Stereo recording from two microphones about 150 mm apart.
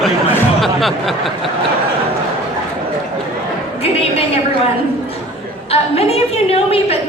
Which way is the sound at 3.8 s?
40° left (ahead or behind).